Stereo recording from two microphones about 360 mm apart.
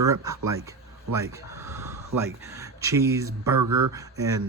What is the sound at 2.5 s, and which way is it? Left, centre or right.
Speech, centre.